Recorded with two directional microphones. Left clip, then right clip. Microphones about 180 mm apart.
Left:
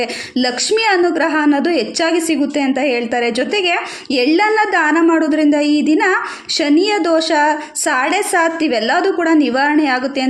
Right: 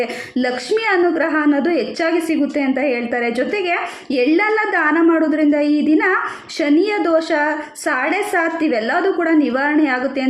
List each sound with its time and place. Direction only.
0.0 s a woman's voice: 35° left (ahead or behind)